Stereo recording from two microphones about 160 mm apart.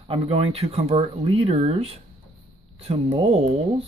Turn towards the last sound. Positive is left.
turn(degrees=-40)  # may be behind; listen again after turning